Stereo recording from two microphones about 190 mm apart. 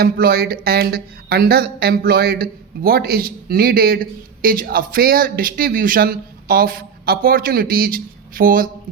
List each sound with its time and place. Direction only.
0.0 s speech: 55° right (ahead or behind)